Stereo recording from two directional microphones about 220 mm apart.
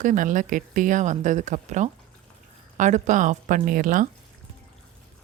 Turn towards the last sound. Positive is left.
turn(degrees=-35)  # may be behind; listen again after turning